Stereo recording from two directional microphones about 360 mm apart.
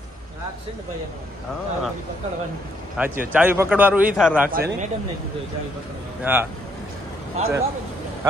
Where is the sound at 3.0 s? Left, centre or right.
Centre.